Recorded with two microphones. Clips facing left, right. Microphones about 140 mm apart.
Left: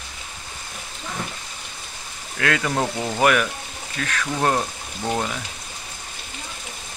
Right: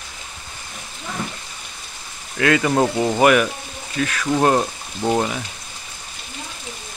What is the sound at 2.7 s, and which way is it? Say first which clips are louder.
Speech: right 6 dB; 20° right (ahead or behind).